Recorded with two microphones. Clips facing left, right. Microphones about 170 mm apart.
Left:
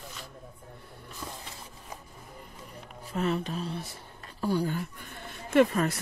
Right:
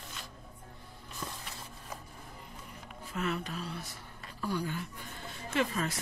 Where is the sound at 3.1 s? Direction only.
30° left (ahead or behind).